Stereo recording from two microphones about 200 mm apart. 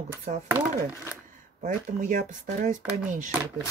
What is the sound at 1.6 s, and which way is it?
Speech, 40° right (ahead or behind).